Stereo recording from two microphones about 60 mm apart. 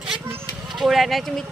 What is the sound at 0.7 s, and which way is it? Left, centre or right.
Speech, centre.